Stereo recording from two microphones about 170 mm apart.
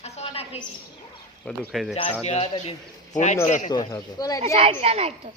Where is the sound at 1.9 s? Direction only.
40° left (ahead or behind).